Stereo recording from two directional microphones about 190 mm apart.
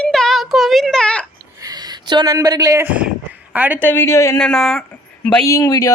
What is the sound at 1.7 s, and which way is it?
Speech, 20° right (ahead or behind).